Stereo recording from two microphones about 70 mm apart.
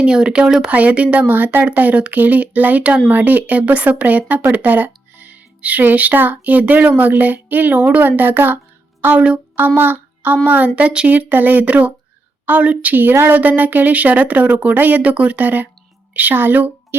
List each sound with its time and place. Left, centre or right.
0.0 s speech: centre; by 8.5 s right
9.0 s music: right
9.6 s a child's voice: right